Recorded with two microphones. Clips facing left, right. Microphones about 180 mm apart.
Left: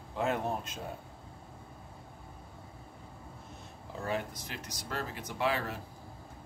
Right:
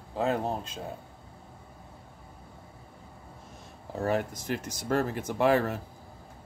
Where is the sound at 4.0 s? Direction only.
45° right (ahead or behind).